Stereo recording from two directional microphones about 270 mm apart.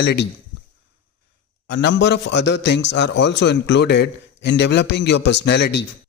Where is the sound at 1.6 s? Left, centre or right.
Left.